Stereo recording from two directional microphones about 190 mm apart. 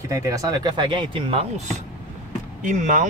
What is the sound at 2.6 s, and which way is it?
Speech, 40° right (ahead or behind).